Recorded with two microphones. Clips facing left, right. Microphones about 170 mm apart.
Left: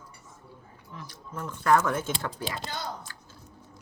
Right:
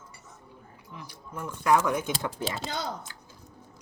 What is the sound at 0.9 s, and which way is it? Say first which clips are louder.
Speech: left 1 dB; 10° right (ahead or behind).